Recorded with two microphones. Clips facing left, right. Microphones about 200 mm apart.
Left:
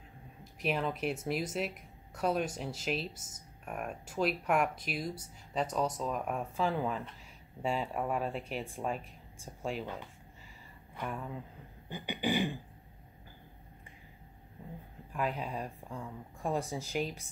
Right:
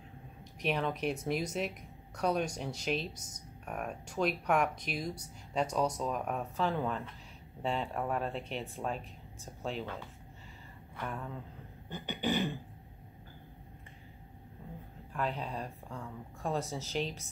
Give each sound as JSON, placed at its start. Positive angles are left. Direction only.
{"t": 0.4, "sound": "speech", "side_deg": 5}
{"t": 3.1, "sound": "speech", "side_deg": 25}
{"t": 3.6, "sound": "speech", "side_deg": 5}
{"t": 11.1, "sound": "speech", "side_deg": 5}
{"t": 15.1, "sound": "speech", "side_deg": 10}